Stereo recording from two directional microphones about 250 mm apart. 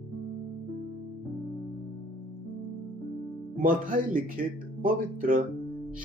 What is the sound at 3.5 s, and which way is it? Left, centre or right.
Speech, right.